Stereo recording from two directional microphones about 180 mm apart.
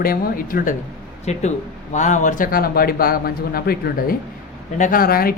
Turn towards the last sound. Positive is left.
turn(degrees=55)  # may be behind; listen again after turning